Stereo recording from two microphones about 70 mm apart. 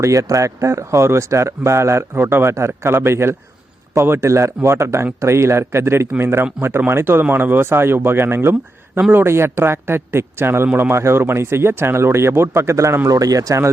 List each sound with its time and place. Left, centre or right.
0.0 s speech: right
13.1 s speech: right